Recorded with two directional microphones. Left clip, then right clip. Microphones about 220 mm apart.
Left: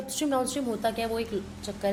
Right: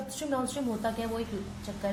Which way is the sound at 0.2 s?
40° left (ahead or behind).